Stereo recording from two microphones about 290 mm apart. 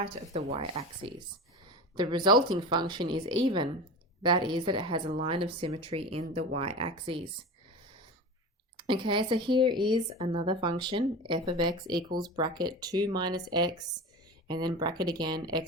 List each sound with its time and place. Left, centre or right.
0.0 s speech: right
8.8 s speech: centre